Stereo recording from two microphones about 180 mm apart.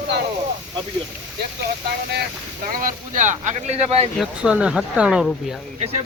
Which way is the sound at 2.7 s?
45° right (ahead or behind).